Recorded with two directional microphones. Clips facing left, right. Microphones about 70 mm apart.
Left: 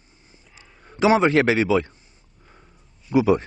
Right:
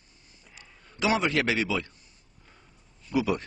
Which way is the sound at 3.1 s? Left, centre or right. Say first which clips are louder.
Left 8 dB; left.